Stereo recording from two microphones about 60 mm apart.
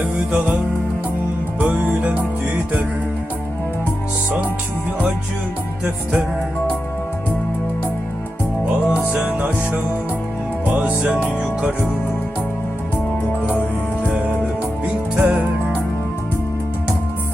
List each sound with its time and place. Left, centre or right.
0.0 s music: centre
1.5 s music: right
9.1 s music: centre
14.1 s music: right